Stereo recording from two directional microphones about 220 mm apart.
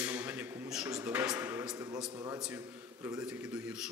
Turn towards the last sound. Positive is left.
turn(degrees=-5)  # may be behind; listen again after turning